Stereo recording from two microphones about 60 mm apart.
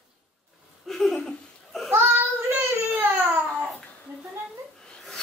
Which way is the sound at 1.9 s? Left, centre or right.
Right.